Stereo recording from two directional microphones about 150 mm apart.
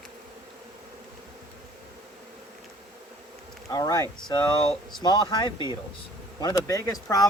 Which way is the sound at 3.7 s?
25° left (ahead or behind).